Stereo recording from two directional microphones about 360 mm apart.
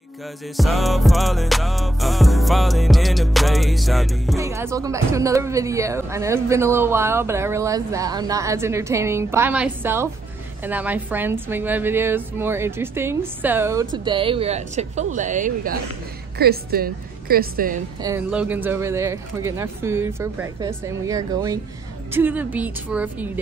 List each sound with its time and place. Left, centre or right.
0.6 s music: centre
13.9 s a woman's voice: centre
18.0 s music: centre
22.1 s a woman's voice: centre